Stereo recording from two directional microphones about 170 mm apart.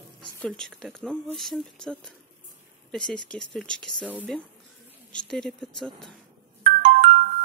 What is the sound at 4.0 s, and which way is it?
Speech, 10° right (ahead or behind).